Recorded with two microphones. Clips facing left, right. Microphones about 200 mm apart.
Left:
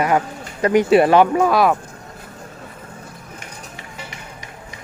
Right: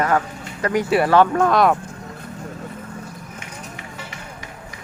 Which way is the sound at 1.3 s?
5° left (ahead or behind).